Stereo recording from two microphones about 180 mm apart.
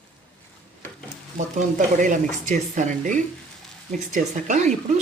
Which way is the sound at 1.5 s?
45° right (ahead or behind).